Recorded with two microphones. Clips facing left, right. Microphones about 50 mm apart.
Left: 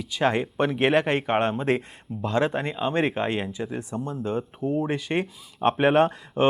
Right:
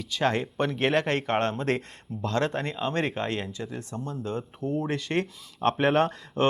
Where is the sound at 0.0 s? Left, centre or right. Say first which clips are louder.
Left 3 dB; centre.